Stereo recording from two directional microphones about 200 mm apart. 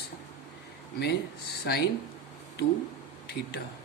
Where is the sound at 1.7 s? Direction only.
55° left (ahead or behind).